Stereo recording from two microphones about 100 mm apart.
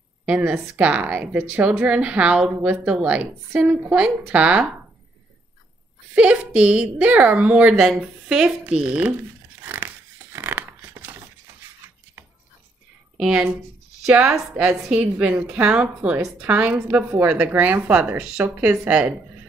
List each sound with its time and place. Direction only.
0.2 s a woman's voice: 15° right (ahead or behind)
6.1 s a woman's voice: 10° right (ahead or behind)
9.6 s tearing: 15° right (ahead or behind)
13.2 s a woman's voice: 10° right (ahead or behind)